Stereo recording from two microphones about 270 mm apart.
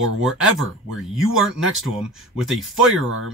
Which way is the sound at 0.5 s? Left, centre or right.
Centre.